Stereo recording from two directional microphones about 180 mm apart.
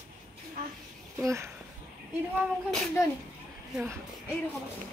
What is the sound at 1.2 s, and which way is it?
Speech, 15° right (ahead or behind).